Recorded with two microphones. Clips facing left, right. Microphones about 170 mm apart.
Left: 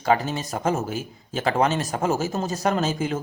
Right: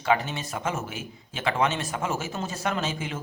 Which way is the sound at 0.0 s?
40° left (ahead or behind).